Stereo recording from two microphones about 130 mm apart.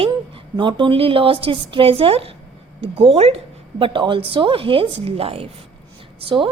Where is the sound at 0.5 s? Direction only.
35° right (ahead or behind).